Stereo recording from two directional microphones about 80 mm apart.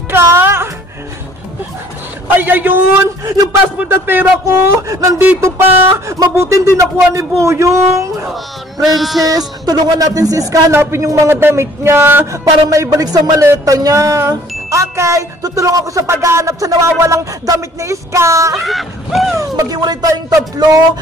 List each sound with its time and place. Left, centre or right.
0.1 s music: right
2.3 s a man's voice: right
3.9 s speech: right
5.2 s speech: right
8.8 s speech: centre
9.7 s speech: right
10.7 s speech: right
12.6 s speech: right
18.6 s speech: centre
19.3 s speech: right